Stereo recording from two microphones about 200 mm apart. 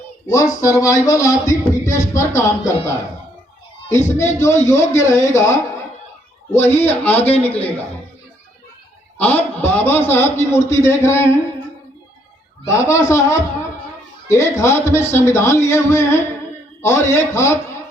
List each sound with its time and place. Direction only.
0.3 s a man's voice: 15° left (ahead or behind)
9.1 s a man's voice: 10° left (ahead or behind)
12.6 s a man's voice: 15° left (ahead or behind)